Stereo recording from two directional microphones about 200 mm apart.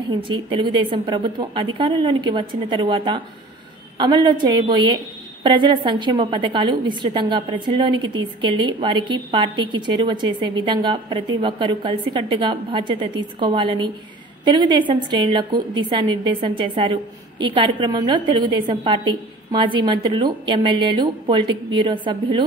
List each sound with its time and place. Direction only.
0.1 s a woman's voice: 25° right (ahead or behind)